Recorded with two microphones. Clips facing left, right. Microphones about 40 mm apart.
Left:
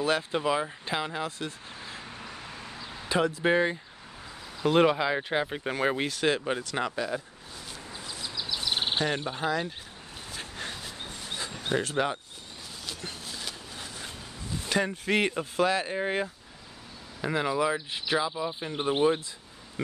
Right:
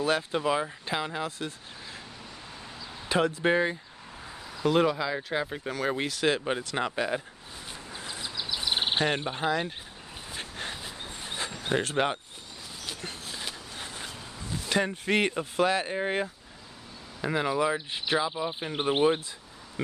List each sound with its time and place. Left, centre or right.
0.0 s speech: centre
3.2 s speech: centre
4.6 s speech: left
5.9 s speech: centre
6.4 s speech: centre
7.0 s speech: right
8.0 s a sound: right
9.0 s speech: right
10.5 s train: centre
11.1 s dog: right
11.9 s speech: right
12.8 s a sound: centre
14.7 s speech: centre
18.3 s speech: right